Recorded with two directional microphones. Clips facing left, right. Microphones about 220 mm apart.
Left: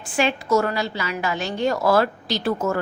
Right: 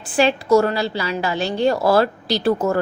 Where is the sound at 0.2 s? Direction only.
35° right (ahead or behind).